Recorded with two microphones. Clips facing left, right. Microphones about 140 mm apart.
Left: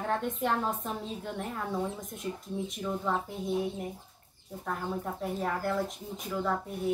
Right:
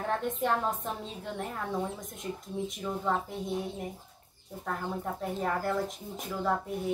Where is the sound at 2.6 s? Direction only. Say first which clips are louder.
Right 3 dB; centre (ahead or behind).